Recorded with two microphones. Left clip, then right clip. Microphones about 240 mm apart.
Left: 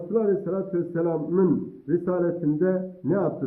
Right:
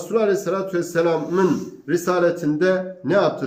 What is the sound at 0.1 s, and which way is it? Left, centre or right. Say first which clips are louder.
Speech: right 5 dB; right.